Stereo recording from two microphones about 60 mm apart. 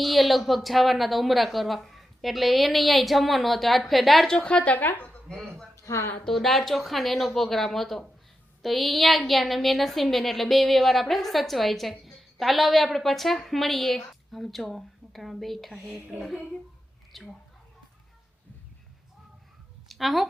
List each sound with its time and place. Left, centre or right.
0.0 s a woman's voice: centre
4.3 s speech: centre
5.7 s a sound: left
6.2 s a woman's voice: centre
17.1 s a woman's voice: centre
19.9 s speech: centre